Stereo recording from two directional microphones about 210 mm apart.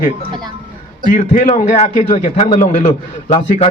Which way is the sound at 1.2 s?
35° left (ahead or behind).